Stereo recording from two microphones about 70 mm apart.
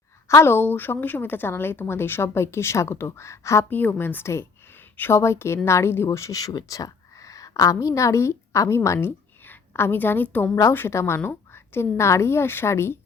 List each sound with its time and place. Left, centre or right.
0.3 s a woman's voice: left
0.5 s a woman's voice: left
3.7 s a woman's voice: left
10.5 s a woman's voice: left
10.8 s a woman's voice: left